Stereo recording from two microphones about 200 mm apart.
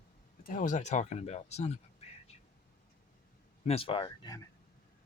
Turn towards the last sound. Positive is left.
turn(degrees=20)  # may be behind; listen again after turning